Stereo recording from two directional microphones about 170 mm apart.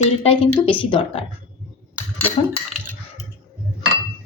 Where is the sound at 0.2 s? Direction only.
35° left (ahead or behind).